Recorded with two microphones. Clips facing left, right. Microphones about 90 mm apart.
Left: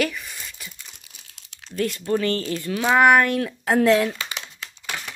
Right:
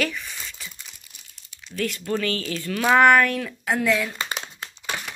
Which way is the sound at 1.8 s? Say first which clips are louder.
Left 3 dB; 20° left (ahead or behind).